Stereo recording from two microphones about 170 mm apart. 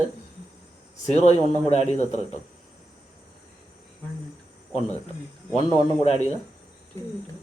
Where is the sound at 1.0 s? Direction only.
40° left (ahead or behind).